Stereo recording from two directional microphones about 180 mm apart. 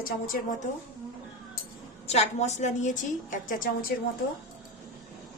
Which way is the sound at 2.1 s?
40° left (ahead or behind).